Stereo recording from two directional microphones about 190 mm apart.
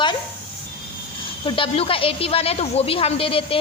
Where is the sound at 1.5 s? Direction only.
30° left (ahead or behind).